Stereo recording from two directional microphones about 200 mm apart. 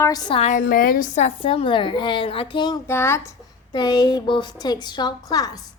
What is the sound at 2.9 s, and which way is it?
A woman's voice, 10° left (ahead or behind).